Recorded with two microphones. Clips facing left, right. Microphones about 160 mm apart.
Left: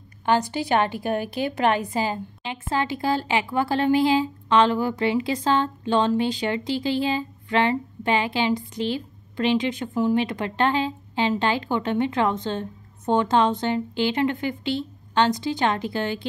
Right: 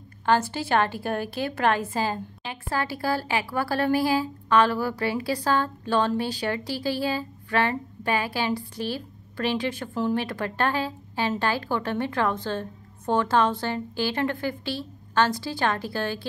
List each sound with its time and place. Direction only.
0.2 s a woman's voice: 15° left (ahead or behind)